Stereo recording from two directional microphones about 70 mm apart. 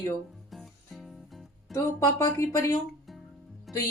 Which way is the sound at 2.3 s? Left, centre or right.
Left.